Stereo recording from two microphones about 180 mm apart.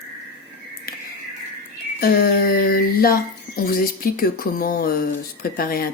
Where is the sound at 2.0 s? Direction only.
55° left (ahead or behind).